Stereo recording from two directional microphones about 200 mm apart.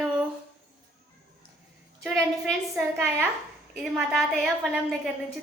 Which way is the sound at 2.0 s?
Centre (ahead or behind).